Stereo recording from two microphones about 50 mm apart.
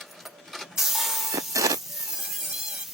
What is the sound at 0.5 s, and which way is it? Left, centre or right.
Printer, centre.